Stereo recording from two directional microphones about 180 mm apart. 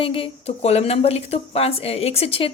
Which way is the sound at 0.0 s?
30° left (ahead or behind).